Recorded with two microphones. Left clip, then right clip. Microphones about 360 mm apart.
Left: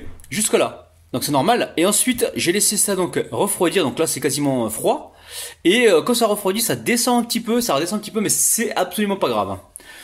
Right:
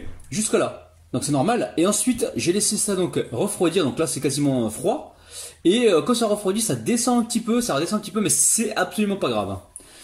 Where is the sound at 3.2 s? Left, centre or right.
Left.